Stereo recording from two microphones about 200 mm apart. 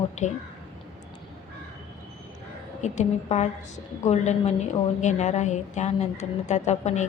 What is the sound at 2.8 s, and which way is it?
A woman's voice, 35° left (ahead or behind).